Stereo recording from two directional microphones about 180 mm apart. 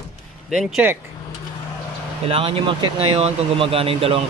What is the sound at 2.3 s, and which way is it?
Speech, 30° right (ahead or behind).